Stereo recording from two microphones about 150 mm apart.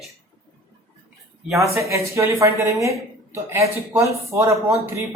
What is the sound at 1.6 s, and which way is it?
A woman's voice, 20° right (ahead or behind).